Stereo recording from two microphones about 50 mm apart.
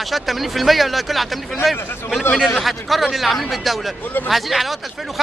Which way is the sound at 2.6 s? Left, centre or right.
Centre.